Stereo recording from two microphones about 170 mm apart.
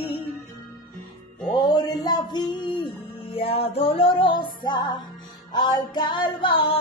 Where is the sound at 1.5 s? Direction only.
25° left (ahead or behind).